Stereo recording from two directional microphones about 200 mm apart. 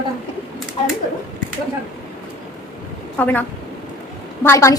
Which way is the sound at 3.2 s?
10° left (ahead or behind).